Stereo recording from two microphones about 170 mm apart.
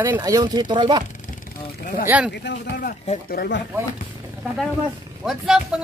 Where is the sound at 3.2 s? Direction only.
70° left (ahead or behind).